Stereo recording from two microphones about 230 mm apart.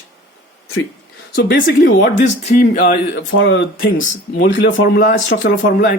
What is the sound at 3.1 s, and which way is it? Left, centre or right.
Speech, left.